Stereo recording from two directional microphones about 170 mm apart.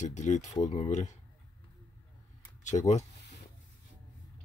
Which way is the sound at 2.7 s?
30° left (ahead or behind).